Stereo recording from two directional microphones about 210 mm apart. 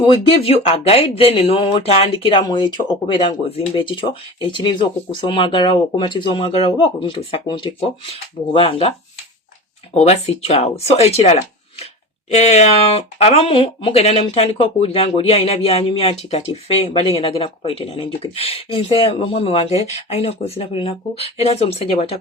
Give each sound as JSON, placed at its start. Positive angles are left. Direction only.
{"t": 0.0, "sound": "speech", "side_deg": 25}